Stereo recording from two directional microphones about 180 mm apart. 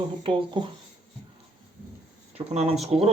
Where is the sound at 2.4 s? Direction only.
25° right (ahead or behind).